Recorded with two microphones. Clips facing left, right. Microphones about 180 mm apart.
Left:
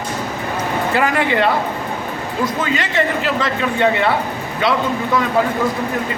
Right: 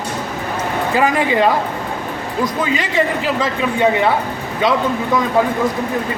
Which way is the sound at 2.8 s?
10° right (ahead or behind).